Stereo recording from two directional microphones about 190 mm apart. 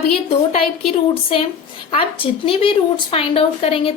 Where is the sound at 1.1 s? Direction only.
30° left (ahead or behind).